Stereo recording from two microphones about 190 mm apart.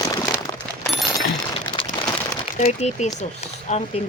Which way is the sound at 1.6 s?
25° left (ahead or behind).